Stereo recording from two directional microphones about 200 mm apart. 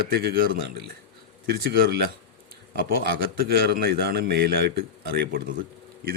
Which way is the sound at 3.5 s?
50° right (ahead or behind).